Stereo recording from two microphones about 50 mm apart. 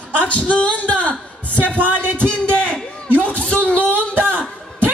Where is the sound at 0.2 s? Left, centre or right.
Left.